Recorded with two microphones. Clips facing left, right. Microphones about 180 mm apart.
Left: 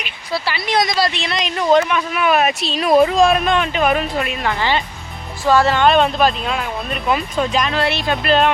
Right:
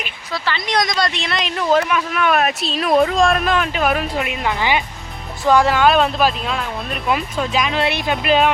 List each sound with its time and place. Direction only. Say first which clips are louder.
0.4 s speech: left 1 dB; 5° left (ahead or behind)
4.2 s speech: even; 15° right (ahead or behind)